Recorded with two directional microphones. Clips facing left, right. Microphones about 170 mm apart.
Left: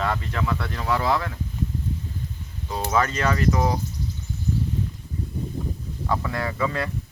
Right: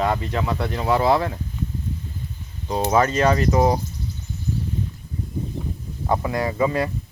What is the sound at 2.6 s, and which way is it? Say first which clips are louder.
Speech: right 5 dB; 25° right (ahead or behind).